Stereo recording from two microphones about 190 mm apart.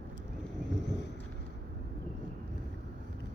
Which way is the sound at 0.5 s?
70° left (ahead or behind).